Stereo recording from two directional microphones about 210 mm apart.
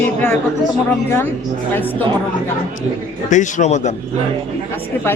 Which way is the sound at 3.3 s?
35° left (ahead or behind).